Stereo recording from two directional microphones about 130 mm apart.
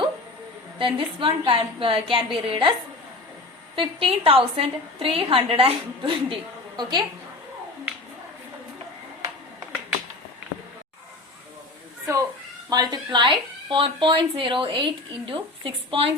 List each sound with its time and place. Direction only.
0.8 s speech: 40° right (ahead or behind)
3.8 s a woman's voice: 45° right (ahead or behind)
12.1 s speech: 25° right (ahead or behind); by 16.1 s 45° right (ahead or behind)